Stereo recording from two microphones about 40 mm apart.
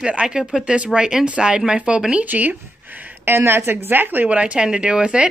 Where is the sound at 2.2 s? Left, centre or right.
Right.